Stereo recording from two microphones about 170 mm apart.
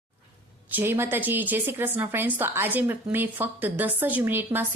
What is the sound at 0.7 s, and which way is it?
A woman's voice, 10° right (ahead or behind).